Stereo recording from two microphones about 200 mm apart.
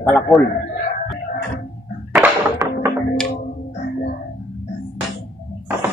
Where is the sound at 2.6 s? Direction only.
15° right (ahead or behind).